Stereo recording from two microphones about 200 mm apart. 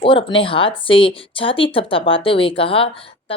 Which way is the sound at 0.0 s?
25° left (ahead or behind).